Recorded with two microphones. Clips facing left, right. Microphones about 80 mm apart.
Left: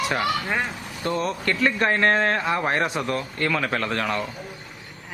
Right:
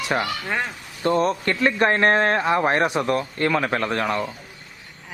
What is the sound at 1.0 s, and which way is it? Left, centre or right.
Speech, right.